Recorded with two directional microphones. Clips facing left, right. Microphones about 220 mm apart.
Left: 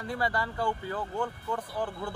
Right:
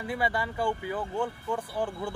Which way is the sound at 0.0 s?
10° right (ahead or behind).